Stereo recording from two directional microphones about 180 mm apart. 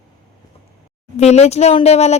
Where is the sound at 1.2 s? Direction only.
35° left (ahead or behind).